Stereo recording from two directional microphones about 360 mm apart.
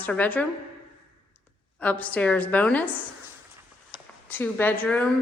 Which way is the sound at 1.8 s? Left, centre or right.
Centre.